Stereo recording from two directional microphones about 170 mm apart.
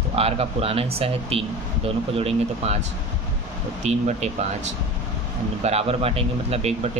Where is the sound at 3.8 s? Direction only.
40° right (ahead or behind).